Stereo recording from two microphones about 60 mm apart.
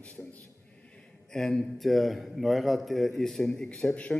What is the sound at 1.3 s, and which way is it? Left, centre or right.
A man's voice, centre.